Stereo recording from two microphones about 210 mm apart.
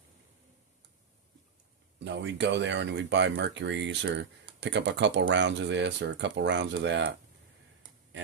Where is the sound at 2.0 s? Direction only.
55° right (ahead or behind).